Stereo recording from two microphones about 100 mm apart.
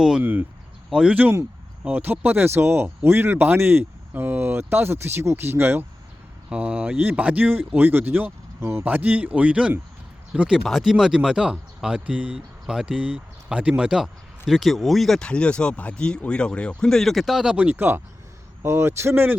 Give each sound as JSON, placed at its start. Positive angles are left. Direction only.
{"t": 0.2, "sound": "speech", "side_deg": -20}
{"t": 0.9, "sound": "speech", "side_deg": -5}
{"t": 6.5, "sound": "speech", "side_deg": -10}